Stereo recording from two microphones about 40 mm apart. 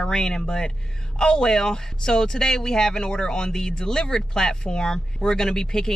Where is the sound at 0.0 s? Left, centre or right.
Centre.